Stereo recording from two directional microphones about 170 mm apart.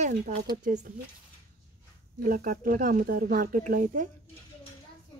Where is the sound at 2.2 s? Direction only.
55° right (ahead or behind).